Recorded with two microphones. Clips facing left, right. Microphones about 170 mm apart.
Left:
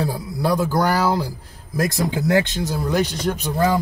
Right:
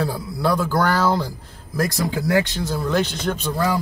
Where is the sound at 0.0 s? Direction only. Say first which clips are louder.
Even; 15° left (ahead or behind).